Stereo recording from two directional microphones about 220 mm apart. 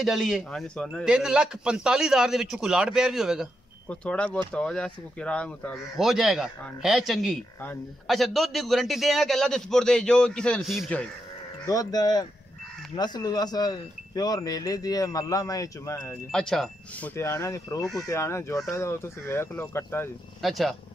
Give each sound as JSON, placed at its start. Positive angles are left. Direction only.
{"t": 0.0, "sound": "speech", "side_deg": 0}
{"t": 11.6, "sound": "speech", "side_deg": 15}
{"t": 16.3, "sound": "speech", "side_deg": 5}
{"t": 20.4, "sound": "speech", "side_deg": 0}